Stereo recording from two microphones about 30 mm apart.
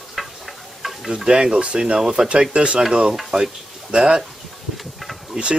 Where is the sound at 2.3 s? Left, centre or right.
Right.